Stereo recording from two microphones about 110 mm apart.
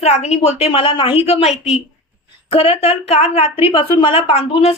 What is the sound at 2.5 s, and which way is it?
Speech, 55° left (ahead or behind).